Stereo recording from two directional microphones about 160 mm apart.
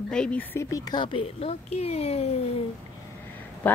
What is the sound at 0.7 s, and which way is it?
Speech, 25° left (ahead or behind).